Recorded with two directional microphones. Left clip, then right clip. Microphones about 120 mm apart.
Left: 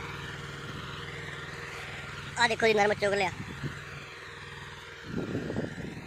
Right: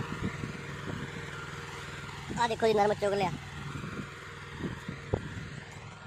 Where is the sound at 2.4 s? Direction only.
5° right (ahead or behind).